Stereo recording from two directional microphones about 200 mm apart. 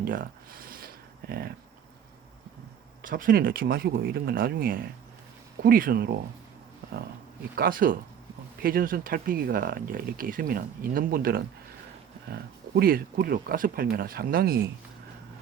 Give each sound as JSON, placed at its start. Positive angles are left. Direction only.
{"t": 0.0, "sound": "a sound", "side_deg": -45}
{"t": 1.3, "sound": "speech", "side_deg": -50}
{"t": 3.0, "sound": "speech", "side_deg": -45}
{"t": 7.5, "sound": "speech", "side_deg": -45}